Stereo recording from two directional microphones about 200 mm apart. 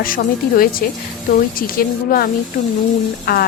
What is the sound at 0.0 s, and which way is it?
Speech, 45° left (ahead or behind).